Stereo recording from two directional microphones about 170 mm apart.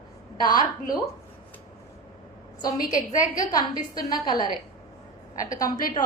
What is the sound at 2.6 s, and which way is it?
A woman's voice, 20° left (ahead or behind).